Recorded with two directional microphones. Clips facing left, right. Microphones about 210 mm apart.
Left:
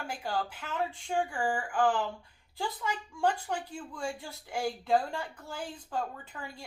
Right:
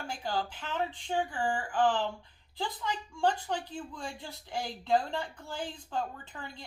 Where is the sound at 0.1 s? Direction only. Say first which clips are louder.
Even; 10° left (ahead or behind).